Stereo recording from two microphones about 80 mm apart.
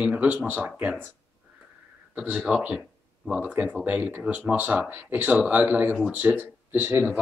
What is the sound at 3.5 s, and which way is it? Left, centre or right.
Speech, centre.